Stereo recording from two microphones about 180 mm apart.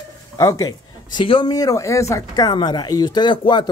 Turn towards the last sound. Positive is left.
turn(degrees=25)  # may be behind; listen again after turning